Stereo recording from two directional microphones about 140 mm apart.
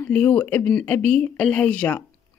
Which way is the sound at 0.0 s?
10° left (ahead or behind).